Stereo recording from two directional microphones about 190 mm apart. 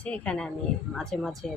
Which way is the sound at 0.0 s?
5° left (ahead or behind).